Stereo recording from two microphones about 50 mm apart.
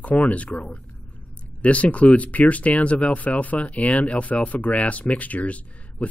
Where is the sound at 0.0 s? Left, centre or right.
Left.